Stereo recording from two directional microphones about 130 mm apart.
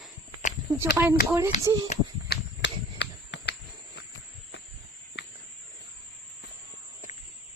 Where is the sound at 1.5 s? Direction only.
65° left (ahead or behind).